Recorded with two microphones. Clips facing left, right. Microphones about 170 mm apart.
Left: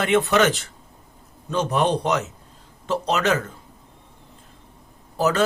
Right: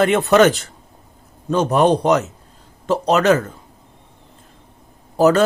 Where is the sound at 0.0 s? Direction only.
40° right (ahead or behind).